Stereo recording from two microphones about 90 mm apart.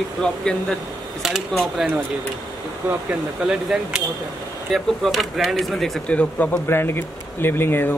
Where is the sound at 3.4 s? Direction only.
5° right (ahead or behind).